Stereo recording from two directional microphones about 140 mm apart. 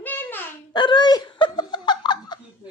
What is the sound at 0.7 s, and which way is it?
Laughter, 30° left (ahead or behind).